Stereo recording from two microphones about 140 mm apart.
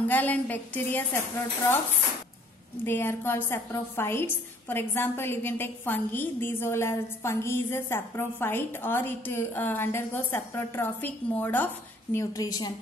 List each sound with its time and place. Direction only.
0.1 s a woman's voice: 10° left (ahead or behind)
2.8 s a woman's voice: 15° left (ahead or behind)